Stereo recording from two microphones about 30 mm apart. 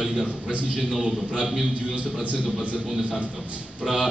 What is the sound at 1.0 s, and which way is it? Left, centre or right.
Speech, right.